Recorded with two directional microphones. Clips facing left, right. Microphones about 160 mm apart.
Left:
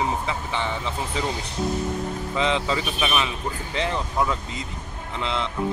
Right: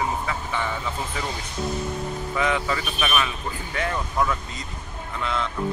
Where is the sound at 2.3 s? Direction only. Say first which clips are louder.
Left 1 dB; 20° left (ahead or behind).